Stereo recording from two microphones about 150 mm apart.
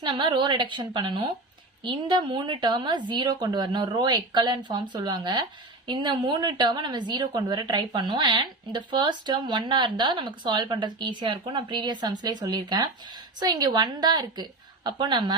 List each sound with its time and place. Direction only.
0.0 s a woman's voice: 30° right (ahead or behind)